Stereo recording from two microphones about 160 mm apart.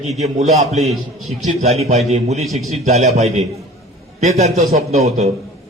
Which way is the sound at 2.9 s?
40° right (ahead or behind).